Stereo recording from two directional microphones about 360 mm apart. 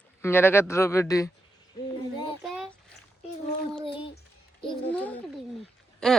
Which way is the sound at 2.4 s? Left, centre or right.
Centre.